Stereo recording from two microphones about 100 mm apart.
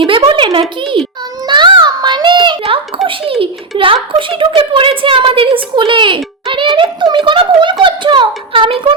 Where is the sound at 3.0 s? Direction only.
60° right (ahead or behind).